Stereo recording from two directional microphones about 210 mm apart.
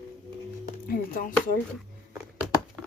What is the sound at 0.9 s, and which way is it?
Speech, 40° left (ahead or behind).